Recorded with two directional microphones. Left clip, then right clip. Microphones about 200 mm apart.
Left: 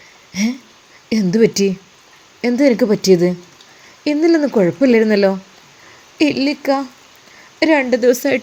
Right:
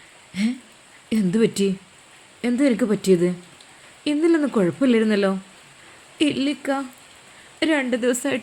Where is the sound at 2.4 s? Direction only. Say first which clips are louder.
Left 7 dB; 10° left (ahead or behind).